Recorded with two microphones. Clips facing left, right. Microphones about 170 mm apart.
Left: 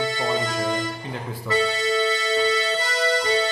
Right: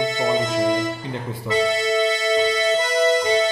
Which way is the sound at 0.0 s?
20° right (ahead or behind).